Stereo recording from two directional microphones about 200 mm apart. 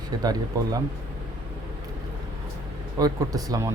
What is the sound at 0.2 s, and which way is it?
Speech, 20° right (ahead or behind).